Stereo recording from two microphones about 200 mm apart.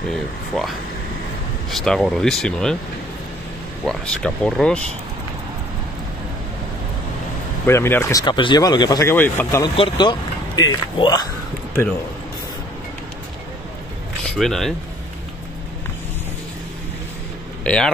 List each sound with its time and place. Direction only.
1.7 s speech: centre (ahead or behind)
3.8 s speech: 5° left (ahead or behind)
7.6 s speech: 10° left (ahead or behind)
9.8 s speech: 20° left (ahead or behind)
14.2 s speech: centre (ahead or behind)
17.6 s speech: 5° left (ahead or behind)